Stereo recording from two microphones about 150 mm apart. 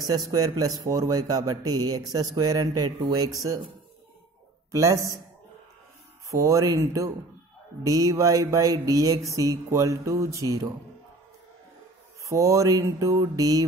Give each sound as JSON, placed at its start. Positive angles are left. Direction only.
{"t": 0.0, "sound": "a man's voice", "side_deg": -25}
{"t": 4.6, "sound": "a man's voice", "side_deg": -20}
{"t": 6.3, "sound": "a man's voice", "side_deg": -20}
{"t": 12.3, "sound": "a man's voice", "side_deg": -20}